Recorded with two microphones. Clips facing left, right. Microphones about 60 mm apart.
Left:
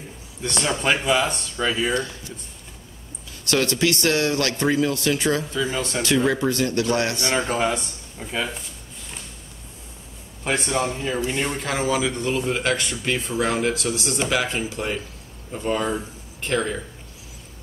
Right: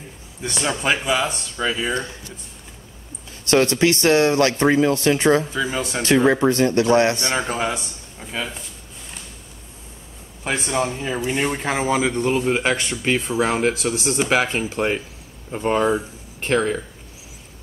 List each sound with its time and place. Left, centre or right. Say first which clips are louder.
0.4 s speech: even; centre
3.4 s speech: right 4 dB; right
5.5 s speech: right 1 dB; centre
6.0 s speech: right 5 dB; right
7.3 s speech: left 1 dB; centre
10.4 s speech: right 1 dB; centre
11.0 s speech: right 2 dB; centre
14.3 s speech: right 5 dB; right